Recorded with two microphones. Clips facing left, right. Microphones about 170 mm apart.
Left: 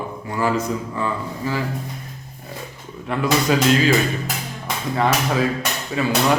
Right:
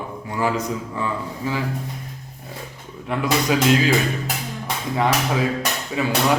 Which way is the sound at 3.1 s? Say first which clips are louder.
Left 1 dB; 15° right (ahead or behind).